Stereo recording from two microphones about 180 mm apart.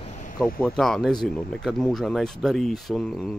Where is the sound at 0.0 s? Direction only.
45° left (ahead or behind).